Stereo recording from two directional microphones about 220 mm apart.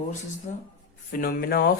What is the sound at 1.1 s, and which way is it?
Speech, 45° left (ahead or behind).